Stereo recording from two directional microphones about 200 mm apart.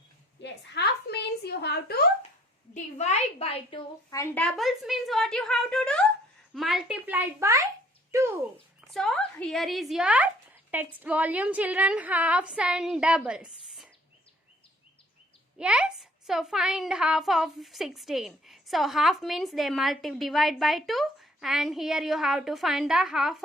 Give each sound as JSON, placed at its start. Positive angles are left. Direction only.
{"t": 0.4, "sound": "a sound", "side_deg": 60}
{"t": 2.7, "sound": "a woman's voice", "side_deg": 35}
{"t": 4.1, "sound": "a child's voice", "side_deg": 15}
{"t": 8.9, "sound": "a child's voice", "side_deg": 0}
{"t": 15.5, "sound": "a child's voice", "side_deg": -5}